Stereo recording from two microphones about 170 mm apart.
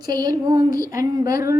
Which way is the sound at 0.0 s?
25° right (ahead or behind).